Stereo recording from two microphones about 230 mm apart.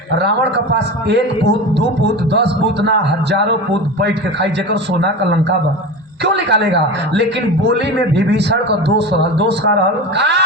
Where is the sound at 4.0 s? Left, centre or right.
Right.